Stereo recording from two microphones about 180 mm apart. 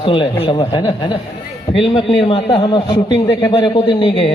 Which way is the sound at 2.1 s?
30° left (ahead or behind).